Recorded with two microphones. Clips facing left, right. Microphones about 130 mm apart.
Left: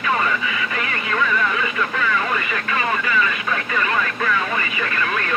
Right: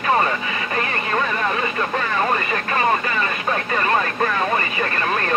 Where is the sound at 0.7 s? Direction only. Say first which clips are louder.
Right 3 dB; 40° right (ahead or behind).